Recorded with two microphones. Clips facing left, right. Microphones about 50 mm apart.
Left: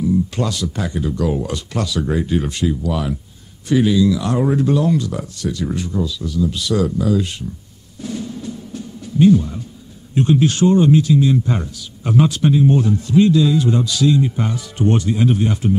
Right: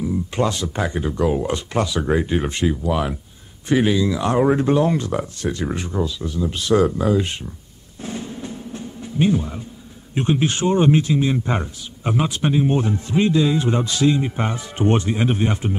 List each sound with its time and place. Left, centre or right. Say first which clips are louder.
0.0 s a man's voice: left 2 dB; right
8.0 s music: left 3 dB; right
10.1 s a man's voice: left 4 dB; right